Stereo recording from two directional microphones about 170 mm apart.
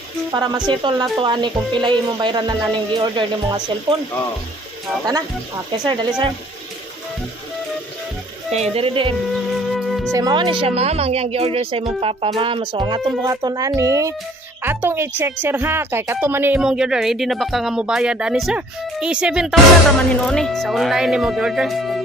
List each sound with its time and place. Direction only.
0.3 s speech: 25° right (ahead or behind)
5.7 s speech: 25° right (ahead or behind)
8.5 s speech: 40° right (ahead or behind)
9.8 s music: centre (ahead or behind)
10.1 s a woman's voice: 25° right (ahead or behind); by 22.0 s centre (ahead or behind)